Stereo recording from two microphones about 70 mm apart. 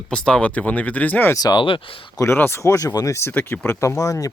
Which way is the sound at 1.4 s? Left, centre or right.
Left.